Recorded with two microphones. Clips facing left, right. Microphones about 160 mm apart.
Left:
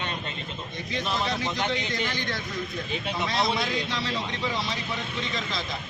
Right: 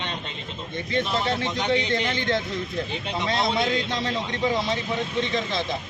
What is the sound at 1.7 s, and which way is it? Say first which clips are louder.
Speech: right 6 dB; 25° right (ahead or behind).